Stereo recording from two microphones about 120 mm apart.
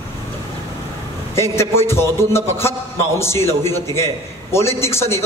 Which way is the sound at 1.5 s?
20° left (ahead or behind).